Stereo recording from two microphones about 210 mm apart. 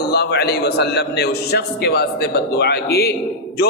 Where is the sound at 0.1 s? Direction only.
50° left (ahead or behind).